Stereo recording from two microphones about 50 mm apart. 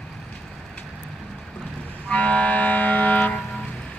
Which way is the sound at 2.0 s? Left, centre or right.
Left.